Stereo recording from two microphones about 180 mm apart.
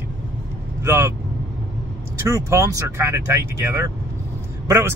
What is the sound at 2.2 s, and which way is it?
Speech, 15° right (ahead or behind).